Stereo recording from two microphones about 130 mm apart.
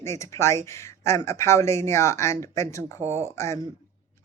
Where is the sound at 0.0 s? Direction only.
20° left (ahead or behind).